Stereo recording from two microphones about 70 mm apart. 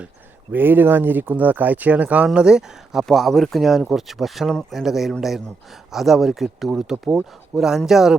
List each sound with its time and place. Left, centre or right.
0.5 s speech: right; by 8.1 s centre